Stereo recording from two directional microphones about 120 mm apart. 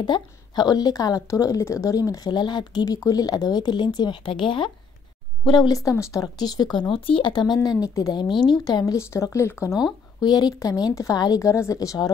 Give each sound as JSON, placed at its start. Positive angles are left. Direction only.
{"t": 0.0, "sound": "a woman's voice", "side_deg": 35}
{"t": 10.2, "sound": "speech", "side_deg": 35}